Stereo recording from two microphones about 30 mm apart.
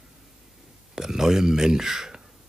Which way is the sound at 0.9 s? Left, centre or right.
Centre.